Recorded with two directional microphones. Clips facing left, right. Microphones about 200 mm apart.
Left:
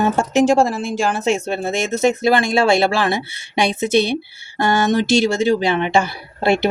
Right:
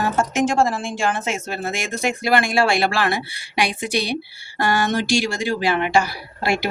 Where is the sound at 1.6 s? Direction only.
25° left (ahead or behind).